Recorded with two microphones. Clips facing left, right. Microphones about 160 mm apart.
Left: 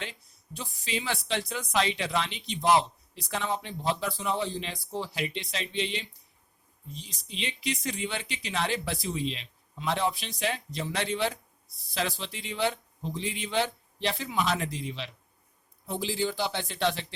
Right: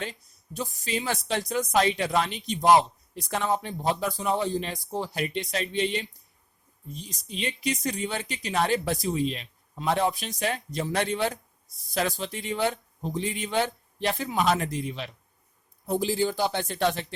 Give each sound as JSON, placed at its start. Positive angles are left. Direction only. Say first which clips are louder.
{"t": 0.0, "sound": "speech", "louder": "right 5 dB", "side_deg": -45}